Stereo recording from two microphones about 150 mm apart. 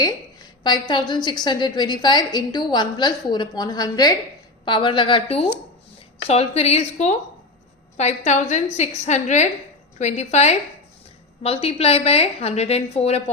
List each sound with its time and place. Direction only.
0.6 s a woman's voice: 30° left (ahead or behind)